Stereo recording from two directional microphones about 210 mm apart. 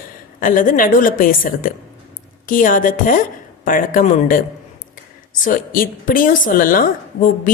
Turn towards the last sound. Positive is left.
turn(degrees=40)  # may be behind; listen again after turning